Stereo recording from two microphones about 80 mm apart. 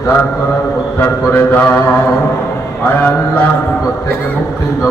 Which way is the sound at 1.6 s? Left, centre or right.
Left.